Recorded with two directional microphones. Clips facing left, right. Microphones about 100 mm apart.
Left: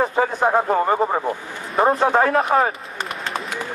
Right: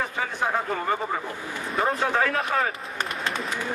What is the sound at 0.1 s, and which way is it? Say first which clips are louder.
A man's voice: left 8 dB; 45° left (ahead or behind).